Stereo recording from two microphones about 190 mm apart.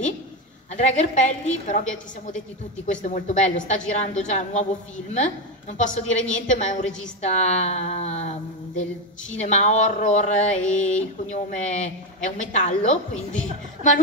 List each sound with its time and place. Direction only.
0.7 s a woman's voice: 40° left (ahead or behind)